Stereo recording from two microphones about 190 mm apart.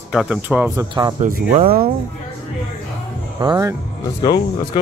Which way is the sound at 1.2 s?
50° right (ahead or behind).